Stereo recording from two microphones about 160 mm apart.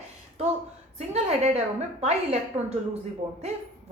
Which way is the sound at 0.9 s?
40° right (ahead or behind).